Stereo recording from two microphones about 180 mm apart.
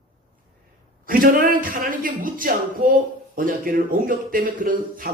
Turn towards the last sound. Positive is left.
turn(degrees=-50)  # may be behind; listen again after turning